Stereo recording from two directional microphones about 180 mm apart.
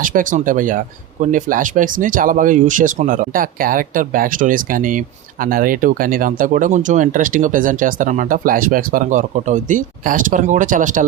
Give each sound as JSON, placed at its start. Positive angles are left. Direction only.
{"t": 0.0, "sound": "speech", "side_deg": -50}